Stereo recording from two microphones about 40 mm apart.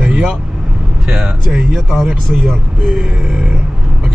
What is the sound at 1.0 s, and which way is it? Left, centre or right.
Speech, right.